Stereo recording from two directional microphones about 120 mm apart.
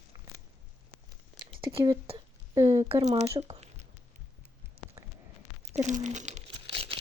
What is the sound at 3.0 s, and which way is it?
Speech, 65° right (ahead or behind).